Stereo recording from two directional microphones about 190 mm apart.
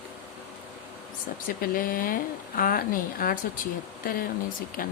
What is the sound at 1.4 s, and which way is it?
Speech, 50° left (ahead or behind).